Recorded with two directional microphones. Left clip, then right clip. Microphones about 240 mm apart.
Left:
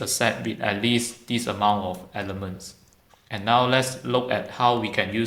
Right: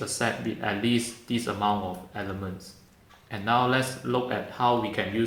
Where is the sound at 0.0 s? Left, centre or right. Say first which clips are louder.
Left 5 dB; left.